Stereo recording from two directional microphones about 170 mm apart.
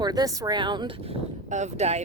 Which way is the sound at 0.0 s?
25° right (ahead or behind).